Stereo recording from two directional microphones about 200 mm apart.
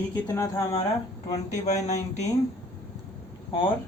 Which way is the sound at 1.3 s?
35° left (ahead or behind).